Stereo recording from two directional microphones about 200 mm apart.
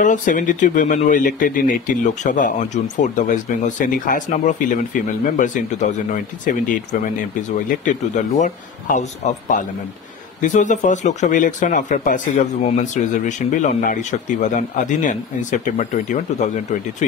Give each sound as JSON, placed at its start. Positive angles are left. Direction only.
{"t": 0.0, "sound": "speech", "side_deg": 40}
{"t": 10.4, "sound": "speech", "side_deg": 40}